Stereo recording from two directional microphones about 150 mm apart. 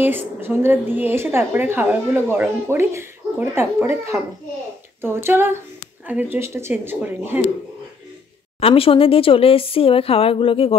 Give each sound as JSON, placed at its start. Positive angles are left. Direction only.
{"t": 0.0, "sound": "a woman's voice", "side_deg": -15}
{"t": 8.5, "sound": "speech", "side_deg": 40}